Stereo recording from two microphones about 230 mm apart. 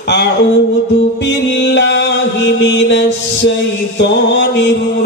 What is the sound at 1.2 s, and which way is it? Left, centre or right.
Music, left.